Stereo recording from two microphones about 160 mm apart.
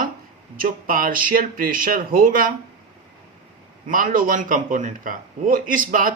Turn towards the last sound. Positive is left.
turn(degrees=-60)  # may be behind; listen again after turning